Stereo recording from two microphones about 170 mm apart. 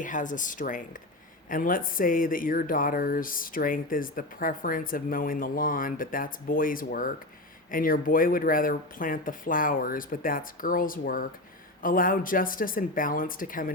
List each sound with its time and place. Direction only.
0.0 s speech: 50° left (ahead or behind)